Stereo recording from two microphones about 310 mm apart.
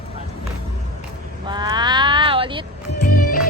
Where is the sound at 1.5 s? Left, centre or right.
Centre.